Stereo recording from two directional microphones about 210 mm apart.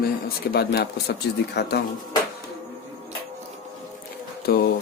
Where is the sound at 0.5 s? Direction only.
50° left (ahead or behind).